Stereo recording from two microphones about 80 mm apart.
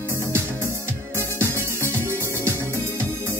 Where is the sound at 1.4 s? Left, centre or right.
Right.